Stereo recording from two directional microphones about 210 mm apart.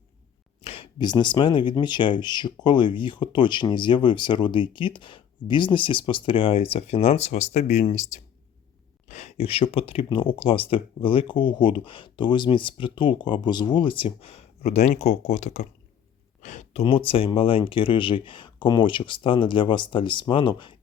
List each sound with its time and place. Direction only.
0.6 s speech: 25° left (ahead or behind)
16.4 s a sound: 35° left (ahead or behind)
16.8 s speech: 25° left (ahead or behind)